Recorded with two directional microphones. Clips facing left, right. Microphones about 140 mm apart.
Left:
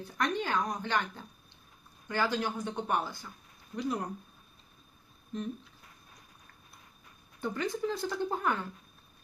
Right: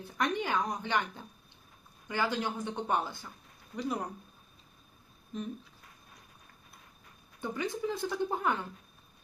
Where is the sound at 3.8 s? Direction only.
Centre (ahead or behind).